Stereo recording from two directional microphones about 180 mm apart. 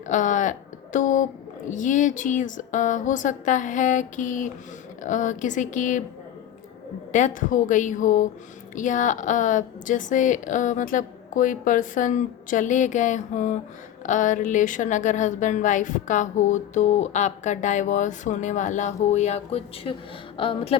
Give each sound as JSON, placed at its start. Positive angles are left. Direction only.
{"t": 0.1, "sound": "a woman's voice", "side_deg": 45}
{"t": 7.1, "sound": "a woman's voice", "side_deg": 45}